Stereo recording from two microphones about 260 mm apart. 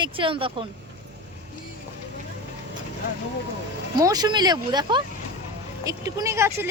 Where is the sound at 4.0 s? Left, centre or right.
Centre.